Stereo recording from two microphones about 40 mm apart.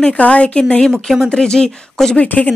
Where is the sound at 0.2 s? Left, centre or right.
Left; by 2.1 s centre.